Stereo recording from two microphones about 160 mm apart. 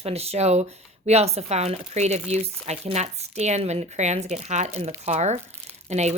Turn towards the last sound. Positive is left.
turn(degrees=-45)  # may be behind; listen again after turning